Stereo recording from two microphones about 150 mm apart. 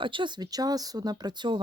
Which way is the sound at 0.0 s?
35° right (ahead or behind).